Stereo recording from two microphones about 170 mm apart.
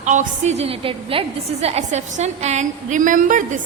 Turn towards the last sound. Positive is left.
turn(degrees=-50)  # may be behind; listen again after turning